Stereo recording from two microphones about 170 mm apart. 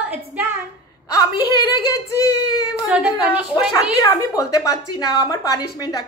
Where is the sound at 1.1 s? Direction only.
25° left (ahead or behind).